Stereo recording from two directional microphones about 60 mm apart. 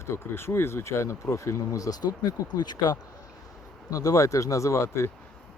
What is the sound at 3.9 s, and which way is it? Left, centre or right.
Speech, left.